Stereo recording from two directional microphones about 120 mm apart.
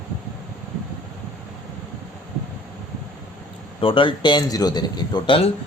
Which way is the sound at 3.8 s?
45° left (ahead or behind).